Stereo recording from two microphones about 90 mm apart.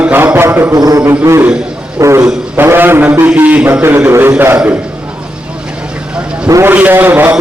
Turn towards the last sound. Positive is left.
turn(degrees=-20)  # may be behind; listen again after turning